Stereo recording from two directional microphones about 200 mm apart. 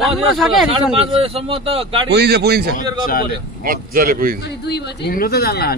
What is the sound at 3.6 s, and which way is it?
Speech, 45° right (ahead or behind).